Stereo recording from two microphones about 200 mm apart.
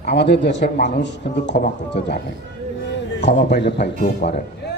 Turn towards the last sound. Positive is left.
turn(degrees=55)  # may be behind; listen again after turning